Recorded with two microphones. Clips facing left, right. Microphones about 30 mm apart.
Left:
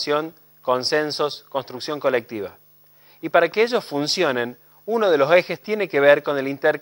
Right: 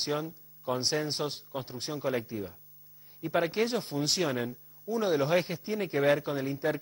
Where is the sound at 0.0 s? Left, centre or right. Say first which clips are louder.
Left 10 dB; left.